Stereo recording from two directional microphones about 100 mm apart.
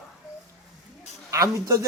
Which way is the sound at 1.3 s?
35° right (ahead or behind).